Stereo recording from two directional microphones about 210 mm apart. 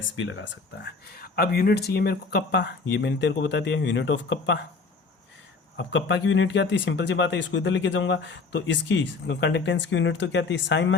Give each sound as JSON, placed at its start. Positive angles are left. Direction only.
{"t": 0.0, "sound": "speech", "side_deg": 65}
{"t": 5.7, "sound": "speech", "side_deg": 60}